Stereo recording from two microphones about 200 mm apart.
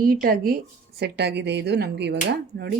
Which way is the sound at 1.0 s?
55° right (ahead or behind).